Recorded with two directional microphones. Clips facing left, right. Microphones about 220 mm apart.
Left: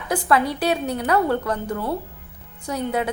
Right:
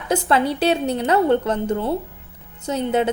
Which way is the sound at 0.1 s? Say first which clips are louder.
Right 2 dB; 25° right (ahead or behind).